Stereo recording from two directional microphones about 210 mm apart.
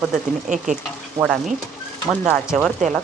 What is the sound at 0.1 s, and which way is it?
Speech, 35° right (ahead or behind).